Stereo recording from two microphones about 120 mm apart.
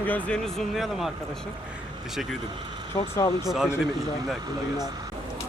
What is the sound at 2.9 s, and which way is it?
Speech, 25° left (ahead or behind).